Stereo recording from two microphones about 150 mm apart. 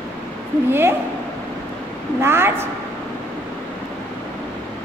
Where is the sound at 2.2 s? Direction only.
15° right (ahead or behind).